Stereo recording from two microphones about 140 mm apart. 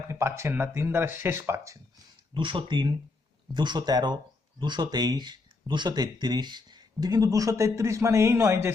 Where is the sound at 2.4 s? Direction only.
35° right (ahead or behind).